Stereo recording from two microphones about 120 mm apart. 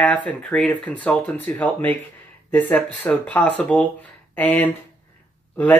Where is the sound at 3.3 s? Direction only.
15° left (ahead or behind).